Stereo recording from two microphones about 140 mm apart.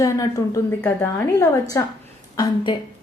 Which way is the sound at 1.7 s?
20° left (ahead or behind).